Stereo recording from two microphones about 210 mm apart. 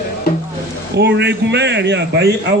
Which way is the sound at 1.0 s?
55° right (ahead or behind).